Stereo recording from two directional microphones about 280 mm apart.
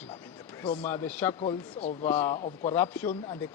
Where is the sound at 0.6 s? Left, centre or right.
Centre.